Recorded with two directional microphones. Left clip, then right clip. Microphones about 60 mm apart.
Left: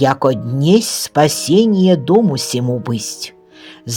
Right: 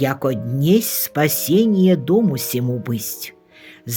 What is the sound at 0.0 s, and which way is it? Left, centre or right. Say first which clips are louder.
Speech: left 7 dB; left.